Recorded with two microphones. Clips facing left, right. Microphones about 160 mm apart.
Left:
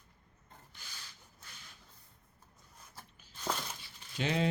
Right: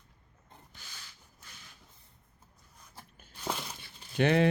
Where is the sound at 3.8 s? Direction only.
60° right (ahead or behind).